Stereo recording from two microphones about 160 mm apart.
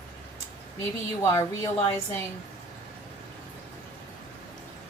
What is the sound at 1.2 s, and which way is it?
Speech, 20° left (ahead or behind).